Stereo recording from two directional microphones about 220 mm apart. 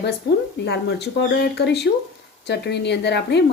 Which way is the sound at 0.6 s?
50° left (ahead or behind).